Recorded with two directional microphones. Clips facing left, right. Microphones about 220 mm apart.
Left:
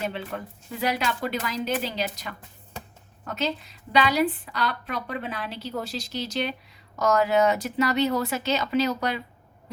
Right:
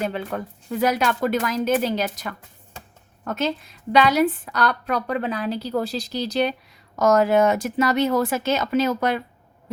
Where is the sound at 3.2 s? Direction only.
50° right (ahead or behind).